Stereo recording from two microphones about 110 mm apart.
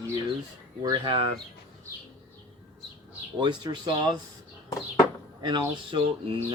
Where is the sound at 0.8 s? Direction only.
45° right (ahead or behind).